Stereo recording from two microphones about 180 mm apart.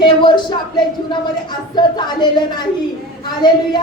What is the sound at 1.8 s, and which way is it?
Speech, 25° left (ahead or behind).